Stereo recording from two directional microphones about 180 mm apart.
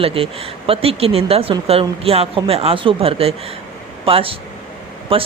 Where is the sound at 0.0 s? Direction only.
30° right (ahead or behind).